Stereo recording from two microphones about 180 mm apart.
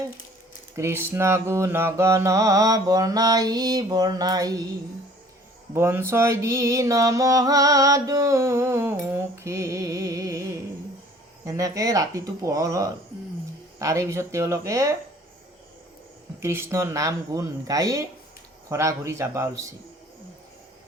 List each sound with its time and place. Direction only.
0.8 s mantra: 15° right (ahead or behind)
5.7 s mantra: 15° right (ahead or behind)
11.4 s mantra: 15° right (ahead or behind)
16.4 s mantra: 15° right (ahead or behind)